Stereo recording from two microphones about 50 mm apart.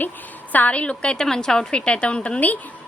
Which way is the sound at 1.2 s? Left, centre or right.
Centre.